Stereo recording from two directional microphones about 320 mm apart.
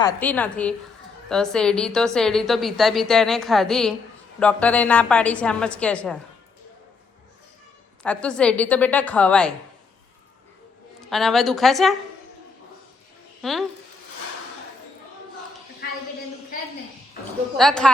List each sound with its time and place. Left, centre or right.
0.0 s a woman's voice: centre
8.0 s a woman's voice: centre
11.0 s a woman's voice: centre
13.4 s speech: centre
15.8 s a sound: left
17.6 s a woman's voice: centre